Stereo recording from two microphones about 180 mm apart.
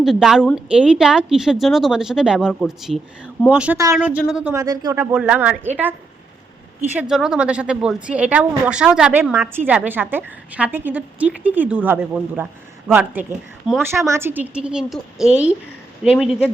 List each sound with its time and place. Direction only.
0.0 s a woman's voice: centre (ahead or behind)
4.5 s speech: 20° right (ahead or behind)
5.1 s a woman's voice: 5° right (ahead or behind)
6.9 s a woman's voice: 5° right (ahead or behind)